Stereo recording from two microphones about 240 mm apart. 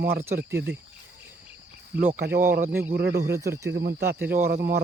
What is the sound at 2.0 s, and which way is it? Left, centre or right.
Speech, right.